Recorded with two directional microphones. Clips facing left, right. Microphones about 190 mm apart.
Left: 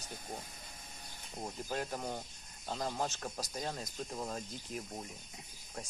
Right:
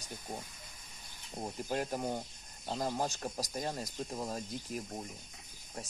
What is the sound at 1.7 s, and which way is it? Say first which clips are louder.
Speech: right 4 dB; 15° right (ahead or behind).